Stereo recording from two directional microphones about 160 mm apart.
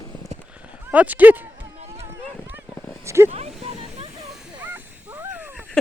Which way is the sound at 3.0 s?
15° right (ahead or behind).